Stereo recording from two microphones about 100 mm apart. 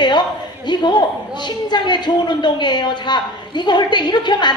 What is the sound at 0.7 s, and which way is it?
A woman's voice, 50° left (ahead or behind).